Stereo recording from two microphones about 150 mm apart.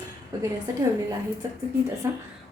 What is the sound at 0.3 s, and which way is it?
Speech, 20° right (ahead or behind).